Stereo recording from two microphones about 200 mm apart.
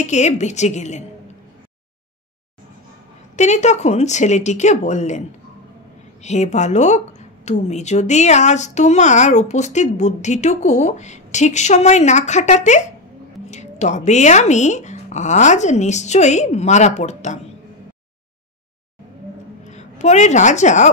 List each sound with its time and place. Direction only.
0.0 s speech: 35° left (ahead or behind)
3.3 s speech: 35° left (ahead or behind)
6.2 s speech: 35° left (ahead or behind)
19.7 s a woman's voice: 35° left (ahead or behind)